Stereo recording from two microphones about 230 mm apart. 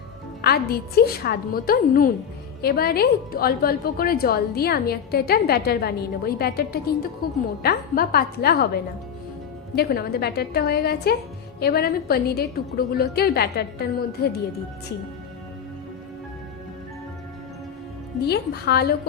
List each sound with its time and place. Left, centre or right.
0.4 s a woman's voice: left
18.2 s a woman's voice: left